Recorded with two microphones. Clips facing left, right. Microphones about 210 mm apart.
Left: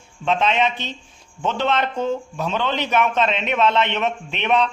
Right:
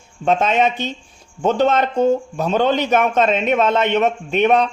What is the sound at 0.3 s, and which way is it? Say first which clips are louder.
Speech: right 3 dB; 45° right (ahead or behind).